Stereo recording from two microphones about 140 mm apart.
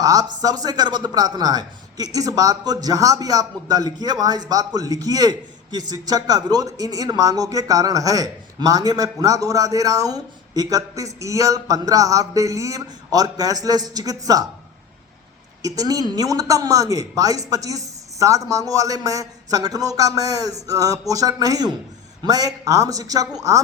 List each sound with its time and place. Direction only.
0.0 s a man's voice: 25° right (ahead or behind)
15.6 s a man's voice: 25° right (ahead or behind)